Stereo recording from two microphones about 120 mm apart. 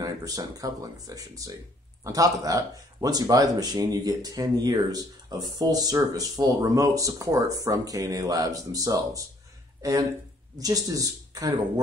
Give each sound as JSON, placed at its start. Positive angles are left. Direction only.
{"t": 0.0, "sound": "speech", "side_deg": -30}